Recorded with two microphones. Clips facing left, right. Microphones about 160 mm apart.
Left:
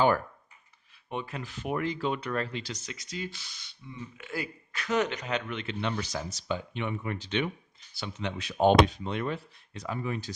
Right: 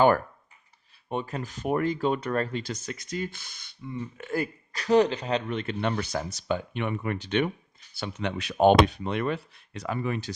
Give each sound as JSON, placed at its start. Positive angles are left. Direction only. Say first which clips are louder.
{"t": 1.1, "sound": "speech", "louder": "right 4 dB", "side_deg": -40}